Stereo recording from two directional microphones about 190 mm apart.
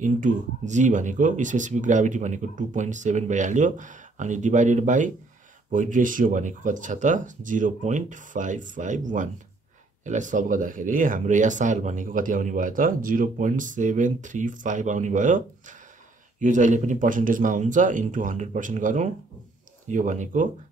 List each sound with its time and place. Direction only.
0.0 s speech: 40° right (ahead or behind)